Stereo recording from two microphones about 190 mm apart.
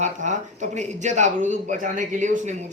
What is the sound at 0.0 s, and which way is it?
Speech, 40° right (ahead or behind).